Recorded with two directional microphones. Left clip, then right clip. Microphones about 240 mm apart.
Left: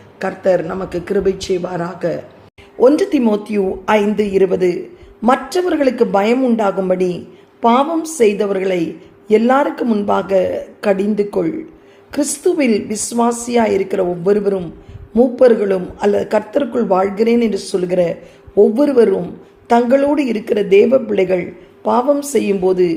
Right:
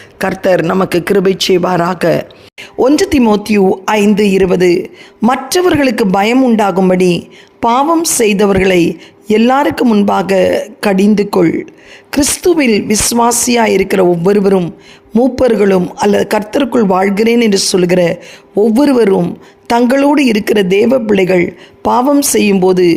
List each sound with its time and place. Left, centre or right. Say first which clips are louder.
0.2 s speech: right 4 dB; right